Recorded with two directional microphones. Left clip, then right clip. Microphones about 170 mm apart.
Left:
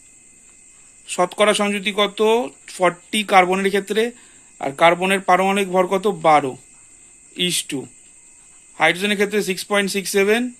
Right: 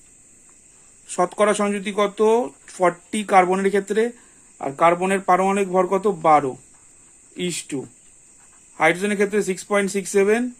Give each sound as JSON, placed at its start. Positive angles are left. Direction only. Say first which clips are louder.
{"t": 1.0, "sound": "speech", "louder": "left 2 dB", "side_deg": 5}
{"t": 4.5, "sound": "speech", "louder": "left 2 dB", "side_deg": 20}